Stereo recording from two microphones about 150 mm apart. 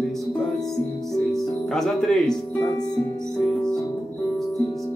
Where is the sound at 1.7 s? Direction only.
5° left (ahead or behind).